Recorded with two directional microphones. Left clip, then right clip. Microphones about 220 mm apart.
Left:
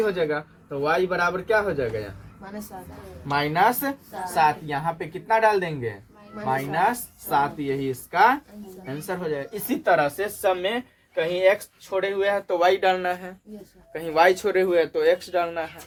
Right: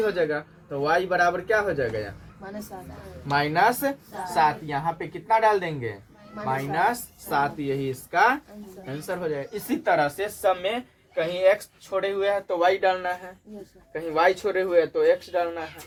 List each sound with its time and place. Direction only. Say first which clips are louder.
0.0 s speech: left 1 dB; 20° left (ahead or behind); by 15.6 s 40° left (ahead or behind)